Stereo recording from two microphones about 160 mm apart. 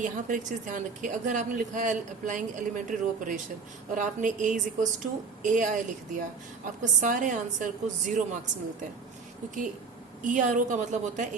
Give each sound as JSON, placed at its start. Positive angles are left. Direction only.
{"t": 0.0, "sound": "speech", "side_deg": -55}
{"t": 10.2, "sound": "speech", "side_deg": -55}